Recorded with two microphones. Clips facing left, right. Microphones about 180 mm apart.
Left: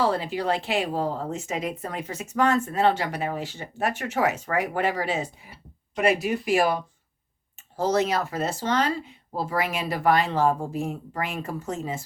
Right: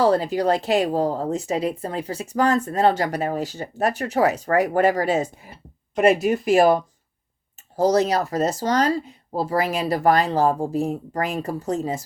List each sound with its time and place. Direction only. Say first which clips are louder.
0.0 s speech: right 6 dB; 40° right (ahead or behind)